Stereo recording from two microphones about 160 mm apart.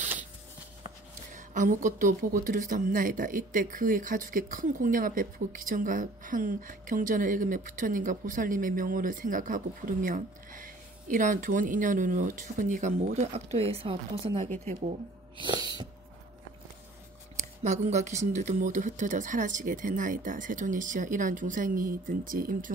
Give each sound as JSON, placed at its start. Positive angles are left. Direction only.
{"t": 1.3, "sound": "a woman's voice", "side_deg": -55}
{"t": 14.3, "sound": "speech", "side_deg": -50}
{"t": 15.4, "sound": "a sound", "side_deg": -30}
{"t": 17.4, "sound": "speech", "side_deg": -45}